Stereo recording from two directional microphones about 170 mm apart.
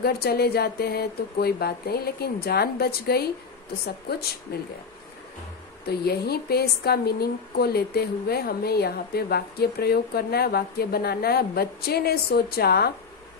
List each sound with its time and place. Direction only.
0.0 s a woman's voice: 65° left (ahead or behind)
4.5 s a woman's voice: 70° left (ahead or behind)
5.9 s a woman's voice: 65° left (ahead or behind)